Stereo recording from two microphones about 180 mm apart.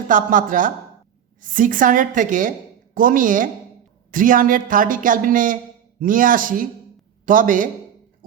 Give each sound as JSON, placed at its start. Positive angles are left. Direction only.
{"t": 0.1, "sound": "speech", "side_deg": -45}